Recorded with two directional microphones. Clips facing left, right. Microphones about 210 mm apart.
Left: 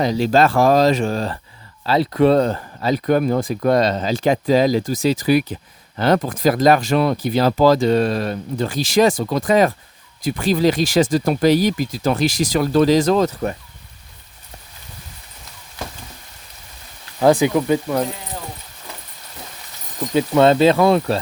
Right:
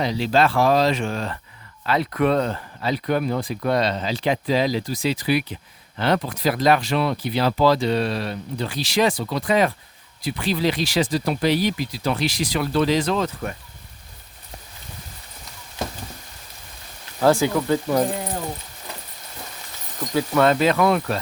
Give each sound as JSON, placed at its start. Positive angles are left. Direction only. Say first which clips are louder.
{"t": 0.0, "sound": "speech", "louder": "left 4 dB", "side_deg": 45}
{"t": 17.2, "sound": "speech", "louder": "left 4 dB", "side_deg": 15}
{"t": 20.1, "sound": "speech", "louder": "left 5 dB", "side_deg": 25}